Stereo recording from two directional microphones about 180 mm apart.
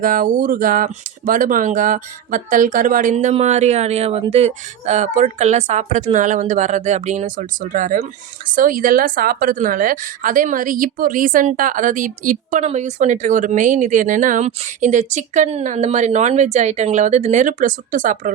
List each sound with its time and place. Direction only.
0.0 s a woman's voice: 50° right (ahead or behind)